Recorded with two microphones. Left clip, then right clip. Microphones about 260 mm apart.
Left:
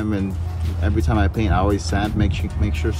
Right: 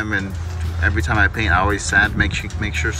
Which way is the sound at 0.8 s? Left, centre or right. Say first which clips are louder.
Right 6 dB; centre.